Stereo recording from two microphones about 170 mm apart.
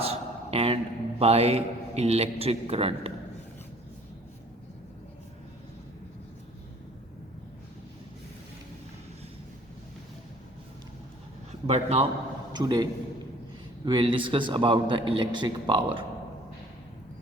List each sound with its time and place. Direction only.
0.0 s a sound: 35° right (ahead or behind)
1.2 s a man's voice: 35° right (ahead or behind)
11.6 s a man's voice: 40° right (ahead or behind)
12.5 s a man's voice: 25° right (ahead or behind)